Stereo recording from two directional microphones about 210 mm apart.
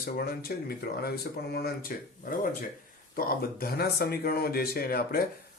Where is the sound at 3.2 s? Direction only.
45° left (ahead or behind).